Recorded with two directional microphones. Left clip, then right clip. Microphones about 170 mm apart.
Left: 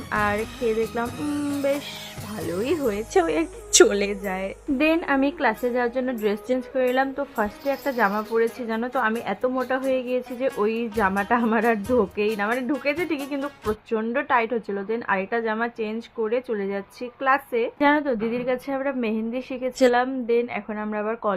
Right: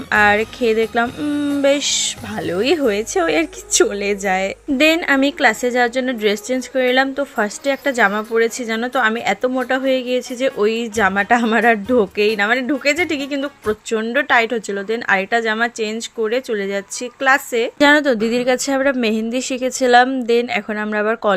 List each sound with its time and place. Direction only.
0.1 s a woman's voice: 40° right (ahead or behind)
3.7 s a woman's voice: centre (ahead or behind)
4.1 s a woman's voice: 35° right (ahead or behind)
4.8 s a woman's voice: 25° right (ahead or behind)
17.7 s a woman's voice: 35° right (ahead or behind)